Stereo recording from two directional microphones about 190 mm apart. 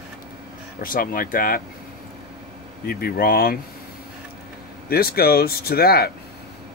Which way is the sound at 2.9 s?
50° left (ahead or behind).